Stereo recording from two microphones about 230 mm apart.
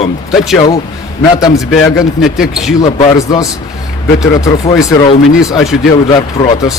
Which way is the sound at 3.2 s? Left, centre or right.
Centre.